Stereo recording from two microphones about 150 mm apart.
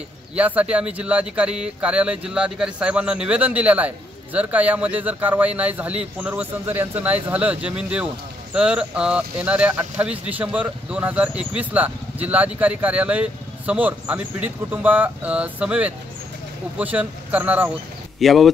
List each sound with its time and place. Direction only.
0.4 s speech: 10° right (ahead or behind)
18.2 s speech: centre (ahead or behind)